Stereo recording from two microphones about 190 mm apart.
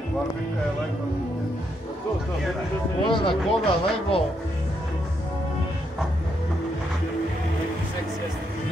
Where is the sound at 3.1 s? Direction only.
25° left (ahead or behind).